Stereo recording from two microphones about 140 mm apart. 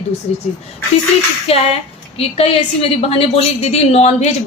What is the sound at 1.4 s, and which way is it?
A woman's voice, 45° left (ahead or behind).